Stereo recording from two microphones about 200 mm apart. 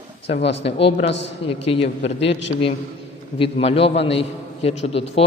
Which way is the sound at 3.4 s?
30° left (ahead or behind).